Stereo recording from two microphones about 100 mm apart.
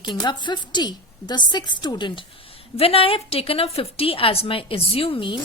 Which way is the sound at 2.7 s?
75° left (ahead or behind).